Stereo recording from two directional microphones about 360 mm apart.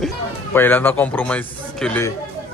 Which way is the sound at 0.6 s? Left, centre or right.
Centre.